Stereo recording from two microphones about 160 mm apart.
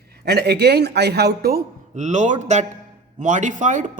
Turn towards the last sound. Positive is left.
turn(degrees=-50)  # may be behind; listen again after turning